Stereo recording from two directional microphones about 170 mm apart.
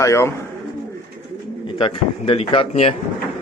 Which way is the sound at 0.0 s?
20° left (ahead or behind).